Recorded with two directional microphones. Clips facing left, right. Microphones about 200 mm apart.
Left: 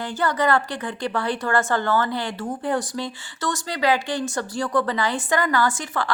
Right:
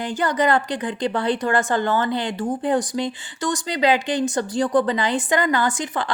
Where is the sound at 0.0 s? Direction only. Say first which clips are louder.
Right 2 dB; 15° right (ahead or behind).